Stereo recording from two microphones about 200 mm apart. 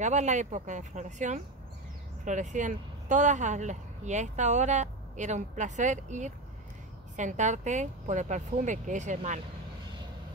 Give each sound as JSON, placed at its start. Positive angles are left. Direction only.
{"t": 0.0, "sound": "speech", "side_deg": -35}